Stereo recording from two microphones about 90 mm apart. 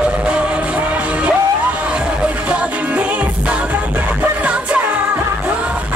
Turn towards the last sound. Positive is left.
turn(degrees=-15)  # may be behind; listen again after turning